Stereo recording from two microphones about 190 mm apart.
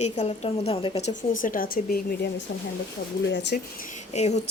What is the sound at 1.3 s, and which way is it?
Speech, 45° left (ahead or behind).